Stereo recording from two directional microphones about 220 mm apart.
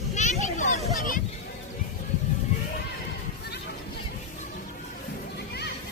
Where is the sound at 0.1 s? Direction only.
30° left (ahead or behind).